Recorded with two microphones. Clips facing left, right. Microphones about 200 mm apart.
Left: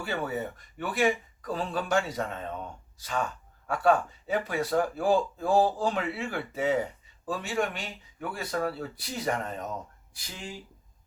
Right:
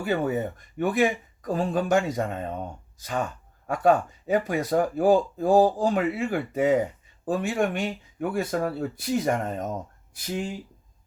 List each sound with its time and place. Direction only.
0.1 s speech: 45° right (ahead or behind)